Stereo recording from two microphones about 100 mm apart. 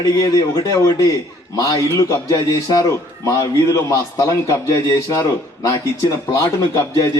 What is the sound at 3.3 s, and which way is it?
A man's voice, 30° left (ahead or behind).